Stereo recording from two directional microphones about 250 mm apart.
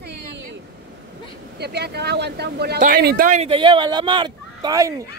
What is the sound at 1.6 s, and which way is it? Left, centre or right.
Speech, right.